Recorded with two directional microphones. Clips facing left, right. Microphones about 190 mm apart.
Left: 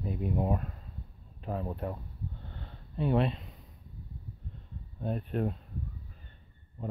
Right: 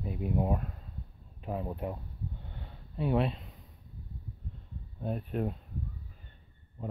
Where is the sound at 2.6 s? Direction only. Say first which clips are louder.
Left 1 dB; 5° right (ahead or behind).